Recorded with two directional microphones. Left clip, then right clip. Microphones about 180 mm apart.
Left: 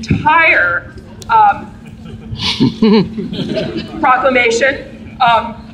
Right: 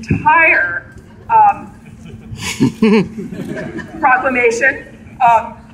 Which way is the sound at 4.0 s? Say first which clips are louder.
Left 1 dB; centre (ahead or behind).